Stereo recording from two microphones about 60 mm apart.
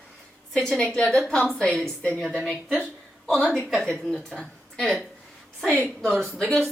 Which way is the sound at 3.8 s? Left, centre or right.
Centre.